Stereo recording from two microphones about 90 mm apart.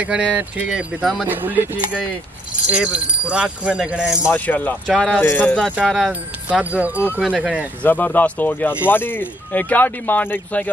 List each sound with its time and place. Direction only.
0.0 s speech: 15° right (ahead or behind)
0.7 s speech: 5° right (ahead or behind)
1.2 s speech: 20° right (ahead or behind)
2.7 s speech: 10° right (ahead or behind)
4.3 s speech: 20° left (ahead or behind)
4.8 s speech: 5° left (ahead or behind)
5.2 s speech: 20° left (ahead or behind)
5.9 s speech: centre (ahead or behind)
6.6 s speech: 15° right (ahead or behind)
7.8 s speech: 20° left (ahead or behind)